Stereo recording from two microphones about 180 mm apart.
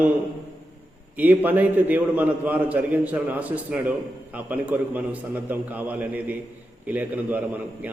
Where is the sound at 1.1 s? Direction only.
10° right (ahead or behind).